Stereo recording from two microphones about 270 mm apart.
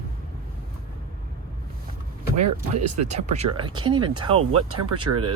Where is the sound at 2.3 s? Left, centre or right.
Right.